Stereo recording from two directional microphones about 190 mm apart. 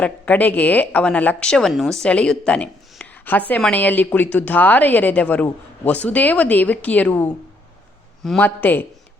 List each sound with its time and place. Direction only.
0.0 s a woman's voice: 10° left (ahead or behind)